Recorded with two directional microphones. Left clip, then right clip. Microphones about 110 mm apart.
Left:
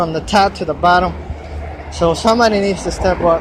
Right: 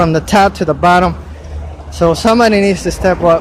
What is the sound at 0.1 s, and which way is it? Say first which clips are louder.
Speech: right 3 dB; 80° right.